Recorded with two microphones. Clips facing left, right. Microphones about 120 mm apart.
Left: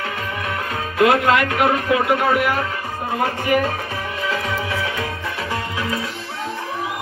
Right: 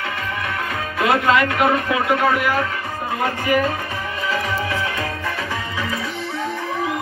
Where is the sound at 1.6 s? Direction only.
5° left (ahead or behind).